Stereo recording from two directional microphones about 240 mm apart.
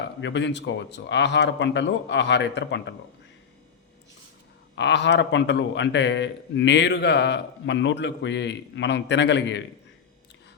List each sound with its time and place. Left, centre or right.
0.2 s a man's voice: left
4.7 s a man's voice: left